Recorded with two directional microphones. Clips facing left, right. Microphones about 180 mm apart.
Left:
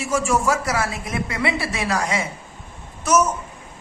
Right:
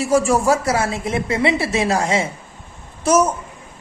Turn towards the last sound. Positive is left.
turn(degrees=-30)  # may be behind; listen again after turning